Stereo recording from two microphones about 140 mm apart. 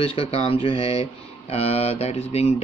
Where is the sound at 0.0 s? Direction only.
45° left (ahead or behind).